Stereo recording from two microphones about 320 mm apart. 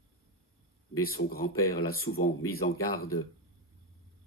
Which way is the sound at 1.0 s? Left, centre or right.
Left.